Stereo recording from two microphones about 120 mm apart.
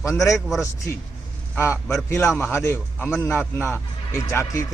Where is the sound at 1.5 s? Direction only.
15° left (ahead or behind).